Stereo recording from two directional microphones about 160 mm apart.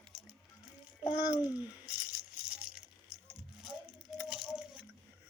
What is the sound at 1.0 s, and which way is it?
Speech, 10° right (ahead or behind).